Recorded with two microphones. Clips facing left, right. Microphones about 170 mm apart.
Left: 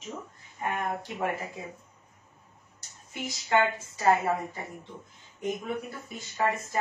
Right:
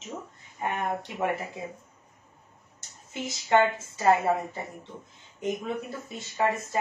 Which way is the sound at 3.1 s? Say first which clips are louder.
Right 3 dB; 25° right (ahead or behind).